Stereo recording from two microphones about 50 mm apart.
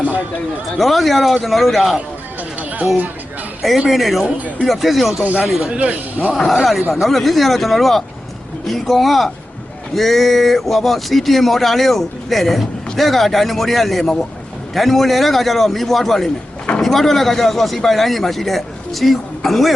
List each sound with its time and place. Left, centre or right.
0.8 s speech: centre
3.8 s speech: centre
5.2 s speech: right
5.5 s speech: centre
5.8 s speech: right
6.6 s speech: centre
14.8 s speech: centre